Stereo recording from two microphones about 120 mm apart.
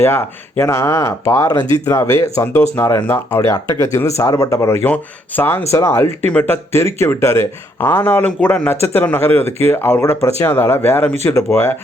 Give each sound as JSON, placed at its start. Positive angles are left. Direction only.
{"t": 0.0, "sound": "speech", "side_deg": 20}